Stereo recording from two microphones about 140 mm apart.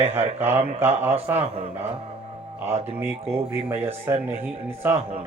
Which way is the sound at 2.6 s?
15° right (ahead or behind).